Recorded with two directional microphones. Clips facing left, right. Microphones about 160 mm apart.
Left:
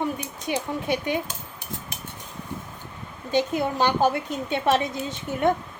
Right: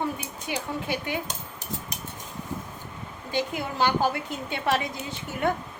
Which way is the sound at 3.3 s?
20° left (ahead or behind).